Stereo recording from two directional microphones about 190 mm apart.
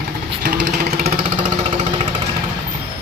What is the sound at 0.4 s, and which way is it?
Vehicle, 50° right (ahead or behind).